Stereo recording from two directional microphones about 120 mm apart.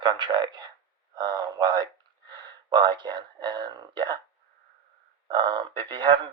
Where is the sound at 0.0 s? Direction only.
35° right (ahead or behind).